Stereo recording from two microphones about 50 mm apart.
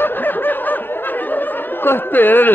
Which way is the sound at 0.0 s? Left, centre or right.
Left.